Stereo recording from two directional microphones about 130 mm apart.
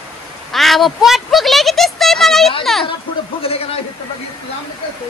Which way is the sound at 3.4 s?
45° left (ahead or behind).